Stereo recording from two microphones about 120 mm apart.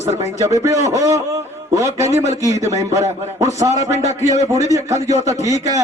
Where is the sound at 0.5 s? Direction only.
25° right (ahead or behind).